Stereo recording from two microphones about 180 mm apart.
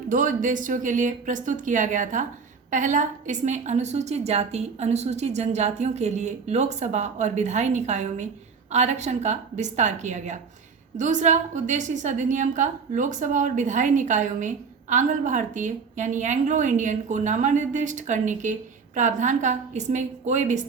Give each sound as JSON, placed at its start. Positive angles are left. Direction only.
{"t": 0.1, "sound": "a woman's voice", "side_deg": -45}